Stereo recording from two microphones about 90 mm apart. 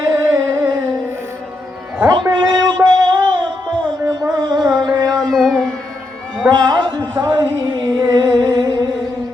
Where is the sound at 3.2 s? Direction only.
60° right (ahead or behind).